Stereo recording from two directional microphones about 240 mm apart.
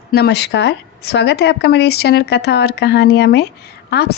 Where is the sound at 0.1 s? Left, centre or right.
Left.